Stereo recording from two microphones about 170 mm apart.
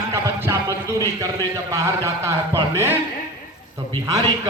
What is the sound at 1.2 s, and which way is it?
A man's voice, 20° right (ahead or behind).